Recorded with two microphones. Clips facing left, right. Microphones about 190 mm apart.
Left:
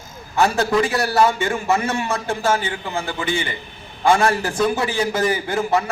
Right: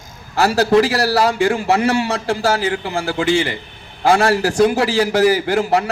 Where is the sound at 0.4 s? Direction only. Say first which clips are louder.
Right 5 dB; 70° right (ahead or behind).